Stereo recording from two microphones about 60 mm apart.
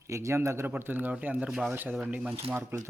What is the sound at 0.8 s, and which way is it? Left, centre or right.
Speech, right.